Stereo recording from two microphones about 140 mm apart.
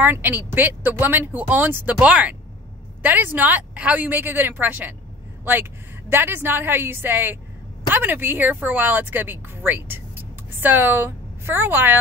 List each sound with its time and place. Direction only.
0.0 s a woman's voice: 15° right (ahead or behind)